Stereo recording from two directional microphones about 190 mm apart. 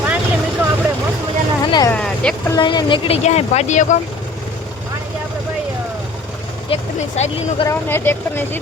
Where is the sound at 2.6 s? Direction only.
25° left (ahead or behind).